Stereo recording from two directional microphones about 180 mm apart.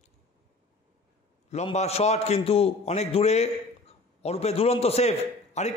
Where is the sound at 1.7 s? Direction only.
35° left (ahead or behind).